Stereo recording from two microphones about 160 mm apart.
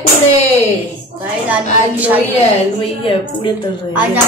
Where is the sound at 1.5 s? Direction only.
10° right (ahead or behind).